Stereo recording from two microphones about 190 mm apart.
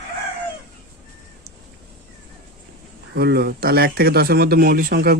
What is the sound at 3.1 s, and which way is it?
Speech, 60° right (ahead or behind).